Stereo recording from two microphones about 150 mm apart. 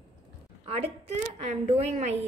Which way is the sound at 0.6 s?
45° right (ahead or behind).